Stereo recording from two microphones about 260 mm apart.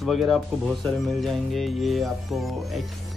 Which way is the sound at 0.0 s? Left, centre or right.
Centre.